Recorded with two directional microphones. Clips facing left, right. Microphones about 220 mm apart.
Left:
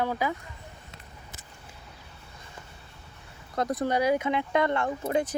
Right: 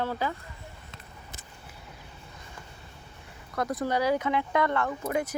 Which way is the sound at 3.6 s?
35° left (ahead or behind).